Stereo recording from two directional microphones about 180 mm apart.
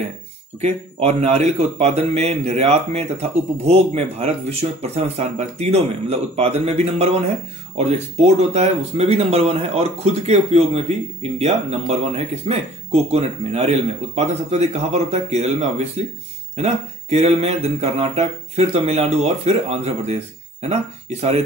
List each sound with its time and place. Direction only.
0.6 s speech: 35° right (ahead or behind)